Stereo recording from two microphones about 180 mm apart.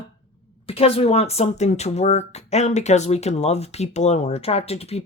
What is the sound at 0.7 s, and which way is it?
Speech, 35° left (ahead or behind).